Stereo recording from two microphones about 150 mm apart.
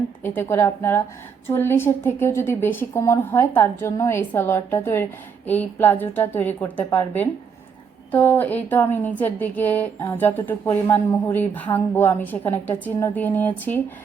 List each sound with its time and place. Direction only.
0.2 s speech: 15° left (ahead or behind)